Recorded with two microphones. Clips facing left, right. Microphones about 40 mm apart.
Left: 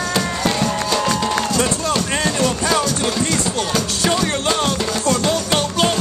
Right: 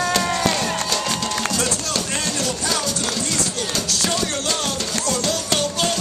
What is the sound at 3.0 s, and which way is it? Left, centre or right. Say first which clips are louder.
Speech: left 5 dB; left.